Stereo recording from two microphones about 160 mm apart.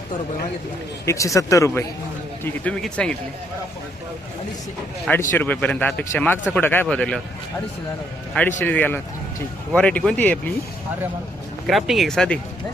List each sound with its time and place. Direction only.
1.0 s speech: 20° left (ahead or behind)
2.4 s speech: 5° left (ahead or behind)
5.3 s speech: 10° left (ahead or behind)
8.3 s speech: 10° left (ahead or behind)
11.6 s speech: centre (ahead or behind)